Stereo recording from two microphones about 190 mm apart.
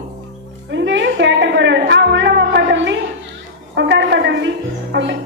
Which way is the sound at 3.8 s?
65° right (ahead or behind).